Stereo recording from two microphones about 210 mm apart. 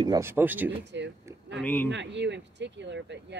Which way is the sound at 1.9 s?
55° right (ahead or behind).